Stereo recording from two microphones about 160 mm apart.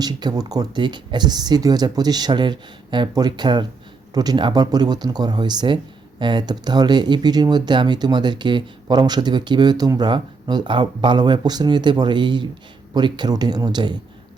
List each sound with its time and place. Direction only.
0.0 s speech: 25° right (ahead or behind)